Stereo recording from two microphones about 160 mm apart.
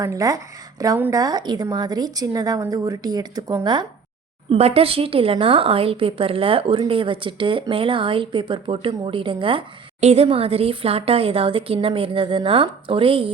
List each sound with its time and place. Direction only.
0.0 s a woman's voice: 20° right (ahead or behind)
4.4 s speech: 40° right (ahead or behind)